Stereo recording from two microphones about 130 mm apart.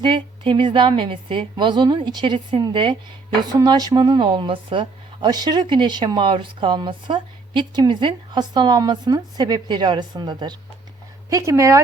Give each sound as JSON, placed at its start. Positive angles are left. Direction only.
{"t": 0.0, "sound": "speech", "side_deg": -40}